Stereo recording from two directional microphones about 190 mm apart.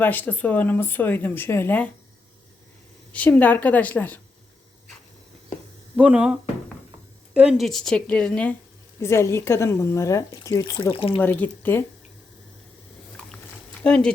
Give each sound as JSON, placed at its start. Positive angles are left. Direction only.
{"t": 0.0, "sound": "speech", "side_deg": 10}
{"t": 3.1, "sound": "speech", "side_deg": 5}
{"t": 6.0, "sound": "a woman's voice", "side_deg": -5}
{"t": 10.9, "sound": "speech", "side_deg": 30}
{"t": 11.2, "sound": "speech", "side_deg": 10}
{"t": 13.1, "sound": "chewing", "side_deg": 5}